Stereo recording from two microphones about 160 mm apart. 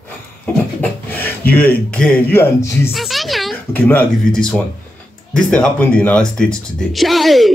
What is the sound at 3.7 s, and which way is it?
Speech, 10° left (ahead or behind).